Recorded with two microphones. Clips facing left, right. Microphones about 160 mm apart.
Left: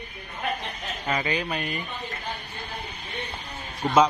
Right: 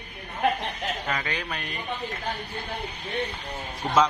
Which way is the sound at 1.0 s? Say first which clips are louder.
Left 3 dB; 10° left (ahead or behind).